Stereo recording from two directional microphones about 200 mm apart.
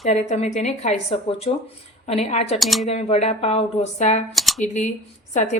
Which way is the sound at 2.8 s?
30° left (ahead or behind).